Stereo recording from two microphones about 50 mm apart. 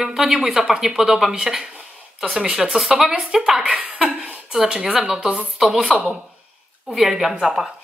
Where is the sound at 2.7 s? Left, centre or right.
Centre.